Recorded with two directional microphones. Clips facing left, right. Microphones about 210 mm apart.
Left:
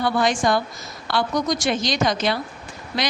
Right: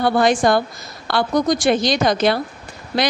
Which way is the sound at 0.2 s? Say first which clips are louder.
Right 5 dB; 60° right (ahead or behind).